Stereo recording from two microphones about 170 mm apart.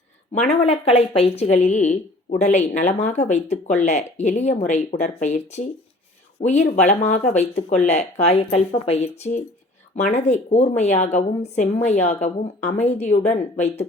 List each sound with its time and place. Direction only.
0.4 s speech: 35° left (ahead or behind)